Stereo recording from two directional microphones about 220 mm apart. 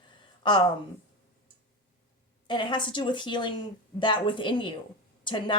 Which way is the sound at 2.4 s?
20° left (ahead or behind).